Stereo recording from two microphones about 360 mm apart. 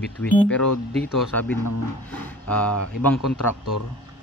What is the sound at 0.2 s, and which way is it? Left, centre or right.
Speech, centre.